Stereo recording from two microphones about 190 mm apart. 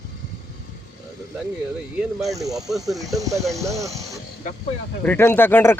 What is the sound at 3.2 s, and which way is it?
Speech, 15° right (ahead or behind).